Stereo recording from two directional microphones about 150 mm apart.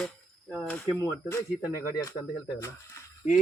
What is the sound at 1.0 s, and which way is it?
Speech, 20° left (ahead or behind).